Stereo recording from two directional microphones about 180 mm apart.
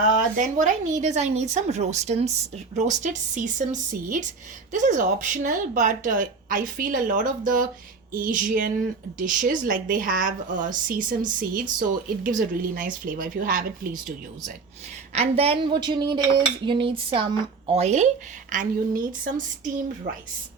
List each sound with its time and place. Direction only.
0.0 s a woman's voice: 45° right (ahead or behind)
15.1 s dishes: 35° right (ahead or behind)
18.5 s a woman's voice: 45° right (ahead or behind)